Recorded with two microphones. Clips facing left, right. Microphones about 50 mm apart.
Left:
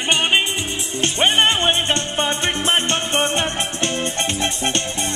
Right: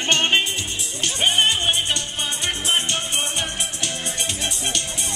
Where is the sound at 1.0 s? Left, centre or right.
Left.